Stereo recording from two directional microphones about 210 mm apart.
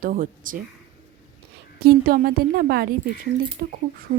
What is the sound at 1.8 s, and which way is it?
Speech, 45° right (ahead or behind).